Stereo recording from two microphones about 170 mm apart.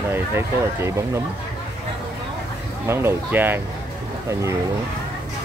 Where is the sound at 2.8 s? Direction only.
15° right (ahead or behind).